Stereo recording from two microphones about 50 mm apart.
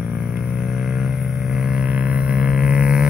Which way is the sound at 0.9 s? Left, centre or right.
Centre.